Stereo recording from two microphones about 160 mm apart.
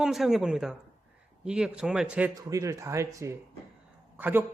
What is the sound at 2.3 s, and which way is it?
Speech, 20° right (ahead or behind).